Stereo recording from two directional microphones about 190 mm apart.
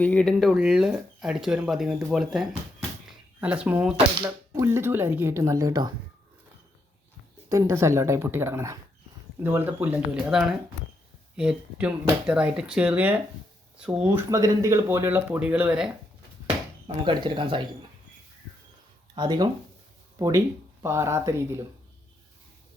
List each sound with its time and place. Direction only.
0.0 s speech: 5° left (ahead or behind); by 5.9 s 20° right (ahead or behind)
7.5 s speech: 15° right (ahead or behind)
16.8 s speech: 25° right (ahead or behind)
19.1 s speech: 25° right (ahead or behind)